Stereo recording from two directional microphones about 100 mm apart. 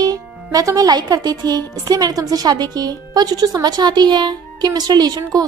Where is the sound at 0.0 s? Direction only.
40° right (ahead or behind).